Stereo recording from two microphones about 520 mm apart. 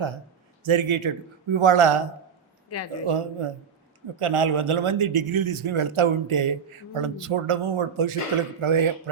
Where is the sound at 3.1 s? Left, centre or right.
Right.